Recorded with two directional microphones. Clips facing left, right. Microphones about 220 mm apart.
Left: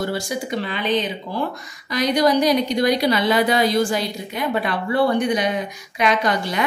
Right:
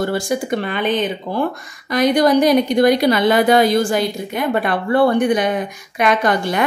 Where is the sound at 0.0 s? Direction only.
50° right (ahead or behind).